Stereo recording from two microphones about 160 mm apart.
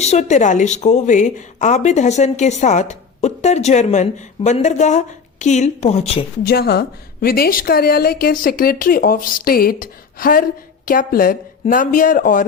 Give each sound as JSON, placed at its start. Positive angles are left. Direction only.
{"t": 0.0, "sound": "a woman's voice", "side_deg": 45}
{"t": 6.4, "sound": "a woman's voice", "side_deg": 75}